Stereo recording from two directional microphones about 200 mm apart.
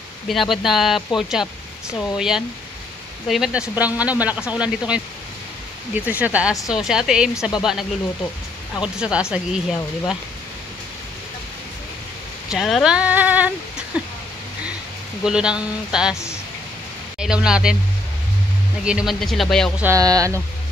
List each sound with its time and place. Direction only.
0.3 s speech: centre (ahead or behind)
8.8 s speech: 5° right (ahead or behind)
12.5 s speech: centre (ahead or behind)
15.2 s speech: 5° right (ahead or behind)
17.2 s speech: 5° right (ahead or behind)
18.9 s speech: 5° right (ahead or behind)
19.8 s speech: 15° right (ahead or behind)